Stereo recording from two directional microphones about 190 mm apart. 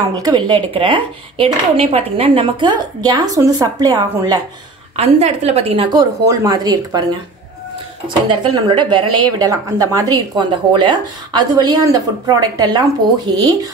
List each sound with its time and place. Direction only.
0.1 s a woman's voice: 20° right (ahead or behind)
4.9 s a woman's voice: 35° right (ahead or behind)
5.9 s a woman's voice: 20° right (ahead or behind)
8.3 s a woman's voice: 25° right (ahead or behind)